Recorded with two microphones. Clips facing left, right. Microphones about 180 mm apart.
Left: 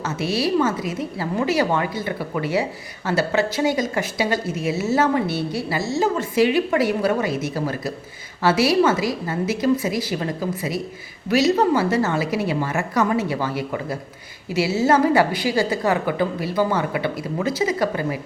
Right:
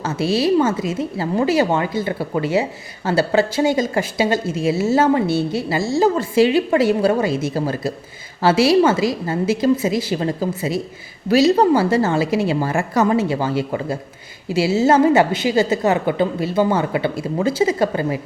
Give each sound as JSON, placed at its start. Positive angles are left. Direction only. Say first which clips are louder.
{"t": 0.0, "sound": "a woman's voice", "louder": "right 4 dB", "side_deg": -30}